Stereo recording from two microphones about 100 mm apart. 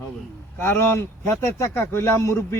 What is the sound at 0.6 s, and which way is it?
A man's voice, 20° left (ahead or behind).